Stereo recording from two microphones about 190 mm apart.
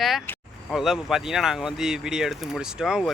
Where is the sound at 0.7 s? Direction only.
Centre (ahead or behind).